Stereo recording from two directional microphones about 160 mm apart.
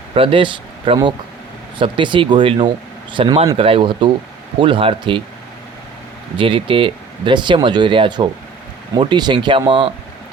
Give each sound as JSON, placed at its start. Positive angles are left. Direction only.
{"t": 0.1, "sound": "speech", "side_deg": -35}
{"t": 6.3, "sound": "speech", "side_deg": -35}